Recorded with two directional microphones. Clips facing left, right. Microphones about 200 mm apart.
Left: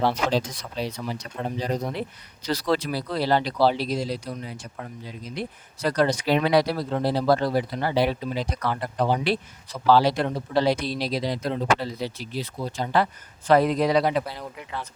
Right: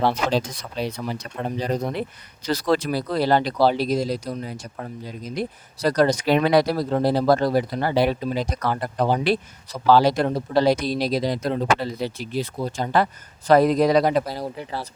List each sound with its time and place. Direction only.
0.0 s speech: 55° right (ahead or behind); by 14.8 s 35° right (ahead or behind)